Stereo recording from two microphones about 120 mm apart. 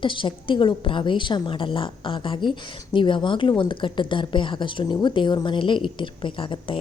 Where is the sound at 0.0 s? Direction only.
45° left (ahead or behind).